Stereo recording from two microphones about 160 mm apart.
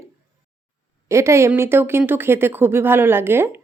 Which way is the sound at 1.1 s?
15° right (ahead or behind).